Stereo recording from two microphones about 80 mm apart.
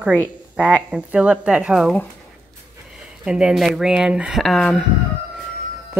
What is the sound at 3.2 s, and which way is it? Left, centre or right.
Speech, centre.